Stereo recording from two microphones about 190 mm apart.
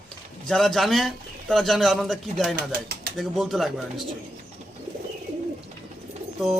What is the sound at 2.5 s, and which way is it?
Speech, 55° right (ahead or behind).